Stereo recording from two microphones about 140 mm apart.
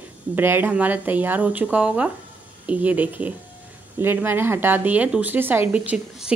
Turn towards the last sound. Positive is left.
turn(degrees=-10)  # may be behind; listen again after turning